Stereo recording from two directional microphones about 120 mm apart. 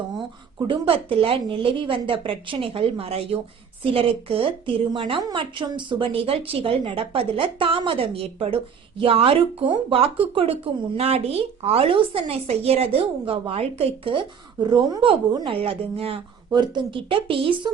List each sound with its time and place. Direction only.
0.7 s speech: 50° right (ahead or behind)
15.5 s speech: 50° right (ahead or behind)
16.5 s speech: 40° right (ahead or behind)